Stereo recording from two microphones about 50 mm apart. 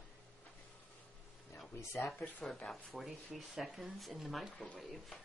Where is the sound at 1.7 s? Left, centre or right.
Left.